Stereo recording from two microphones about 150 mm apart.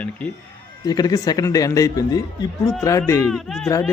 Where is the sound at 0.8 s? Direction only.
25° left (ahead or behind).